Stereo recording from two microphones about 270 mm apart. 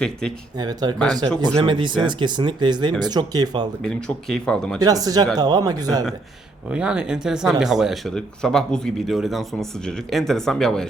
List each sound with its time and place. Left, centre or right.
0.6 s speech: centre
3.8 s speech: centre
4.8 s speech: centre